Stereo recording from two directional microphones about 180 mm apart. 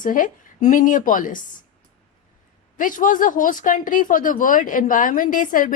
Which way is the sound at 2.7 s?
50° left (ahead or behind).